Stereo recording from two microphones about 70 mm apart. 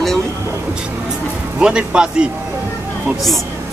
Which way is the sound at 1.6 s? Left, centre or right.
Centre.